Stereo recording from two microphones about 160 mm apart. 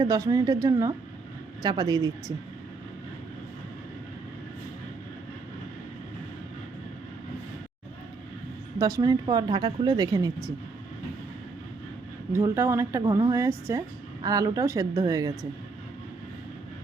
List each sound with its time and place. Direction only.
0.0 s a woman's voice: 20° right (ahead or behind)
8.8 s a woman's voice: 20° right (ahead or behind)
12.3 s speech: 15° right (ahead or behind)